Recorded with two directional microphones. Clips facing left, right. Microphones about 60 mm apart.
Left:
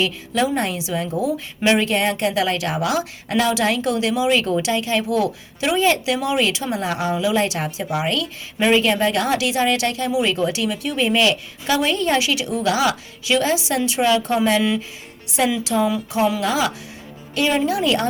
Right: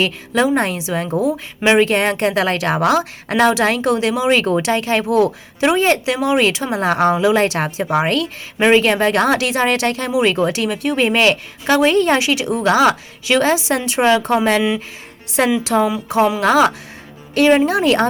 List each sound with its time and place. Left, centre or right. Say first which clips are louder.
0.0 s a woman's voice: right 4 dB; right
8.5 s a woman's voice: right 4 dB; right
15.7 s a woman's voice: right 4 dB; right
16.4 s speech: right 7 dB; right
17.3 s a woman's voice: right 6 dB; right